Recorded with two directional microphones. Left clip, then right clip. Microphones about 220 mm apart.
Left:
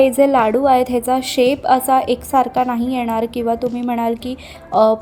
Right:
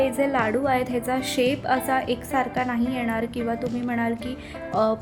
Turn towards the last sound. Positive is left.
turn(degrees=0)  # may be behind; listen again after turning